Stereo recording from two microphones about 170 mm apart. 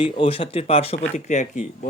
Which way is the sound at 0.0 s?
30° left (ahead or behind).